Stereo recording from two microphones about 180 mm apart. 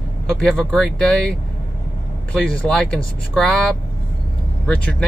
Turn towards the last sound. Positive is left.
turn(degrees=5)  # may be behind; listen again after turning